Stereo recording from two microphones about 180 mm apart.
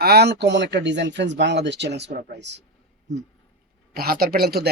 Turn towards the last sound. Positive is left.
turn(degrees=-60)  # may be behind; listen again after turning